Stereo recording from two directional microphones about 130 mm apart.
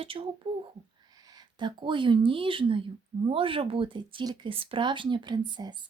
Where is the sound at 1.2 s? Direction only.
35° right (ahead or behind).